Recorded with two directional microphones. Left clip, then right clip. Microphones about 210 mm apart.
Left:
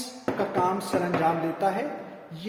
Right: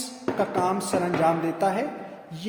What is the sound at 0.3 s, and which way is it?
A man's voice, 35° right (ahead or behind).